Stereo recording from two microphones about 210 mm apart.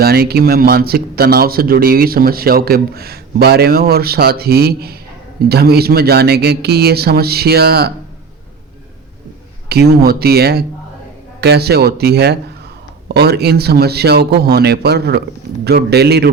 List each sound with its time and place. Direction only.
0.0 s speech: 45° right (ahead or behind)
9.6 s speech: 50° right (ahead or behind)